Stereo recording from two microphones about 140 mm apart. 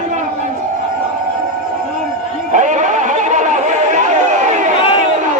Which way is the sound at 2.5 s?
65° right (ahead or behind).